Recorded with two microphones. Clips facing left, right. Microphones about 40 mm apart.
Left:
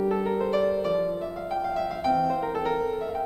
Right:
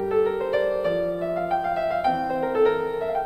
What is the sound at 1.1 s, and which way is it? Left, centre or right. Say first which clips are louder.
Music: right 5 dB; right.